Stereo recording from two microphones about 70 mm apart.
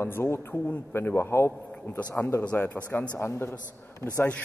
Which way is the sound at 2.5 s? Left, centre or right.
Left.